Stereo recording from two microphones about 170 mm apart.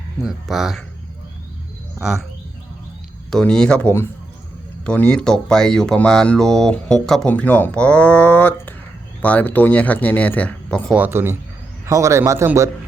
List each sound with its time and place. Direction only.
0.2 s speech: centre (ahead or behind)
2.0 s speech: 5° right (ahead or behind)
3.2 s speech: 5° left (ahead or behind)
10.9 s a man's voice: 10° right (ahead or behind)